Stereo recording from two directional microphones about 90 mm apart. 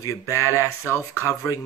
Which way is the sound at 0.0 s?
35° left (ahead or behind).